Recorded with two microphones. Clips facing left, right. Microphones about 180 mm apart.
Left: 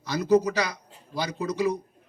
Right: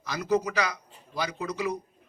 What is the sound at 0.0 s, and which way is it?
A man's voice, 35° left (ahead or behind).